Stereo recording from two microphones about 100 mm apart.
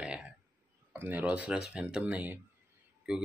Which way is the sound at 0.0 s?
10° right (ahead or behind).